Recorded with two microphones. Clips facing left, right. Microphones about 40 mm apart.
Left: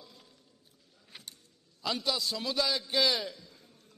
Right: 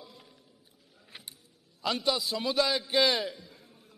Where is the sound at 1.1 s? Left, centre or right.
Centre.